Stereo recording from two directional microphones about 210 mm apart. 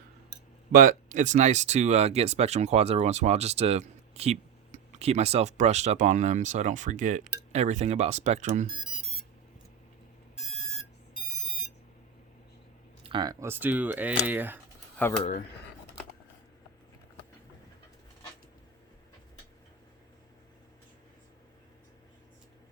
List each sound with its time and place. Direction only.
0.7 s speech: 40° right (ahead or behind)
13.0 s speech: 25° right (ahead or behind)